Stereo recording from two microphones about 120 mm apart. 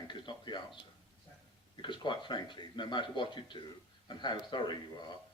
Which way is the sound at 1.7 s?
40° left (ahead or behind).